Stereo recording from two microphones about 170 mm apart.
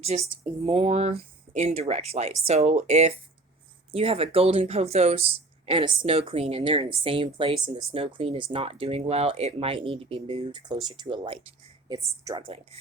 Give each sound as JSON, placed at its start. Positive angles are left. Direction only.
{"t": 0.1, "sound": "speech", "side_deg": -45}
{"t": 0.6, "sound": "speech", "side_deg": -30}
{"t": 12.4, "sound": "speech", "side_deg": -30}